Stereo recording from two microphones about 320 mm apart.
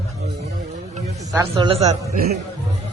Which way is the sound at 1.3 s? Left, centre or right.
Centre.